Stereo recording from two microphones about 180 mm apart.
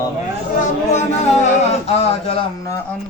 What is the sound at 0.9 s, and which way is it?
Speech, 40° left (ahead or behind).